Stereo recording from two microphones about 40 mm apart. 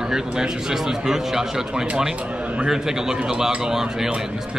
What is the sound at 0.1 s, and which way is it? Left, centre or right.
Speech, centre.